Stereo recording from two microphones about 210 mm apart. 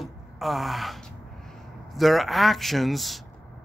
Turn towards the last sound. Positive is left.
turn(degrees=0)  # may be behind; listen again after turning